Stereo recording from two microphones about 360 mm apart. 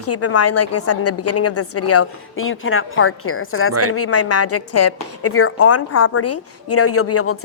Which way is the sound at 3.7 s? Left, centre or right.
Right.